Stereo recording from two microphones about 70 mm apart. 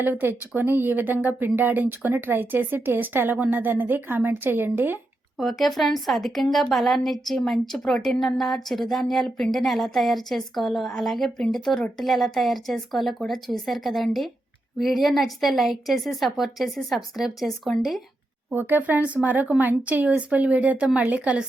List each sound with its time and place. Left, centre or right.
0.0 s speech: right
5.4 s speech: centre
18.5 s speech: right